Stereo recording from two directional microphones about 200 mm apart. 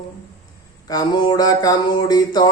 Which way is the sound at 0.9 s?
20° left (ahead or behind).